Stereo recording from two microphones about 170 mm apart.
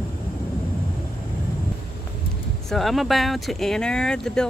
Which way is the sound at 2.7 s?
Centre (ahead or behind).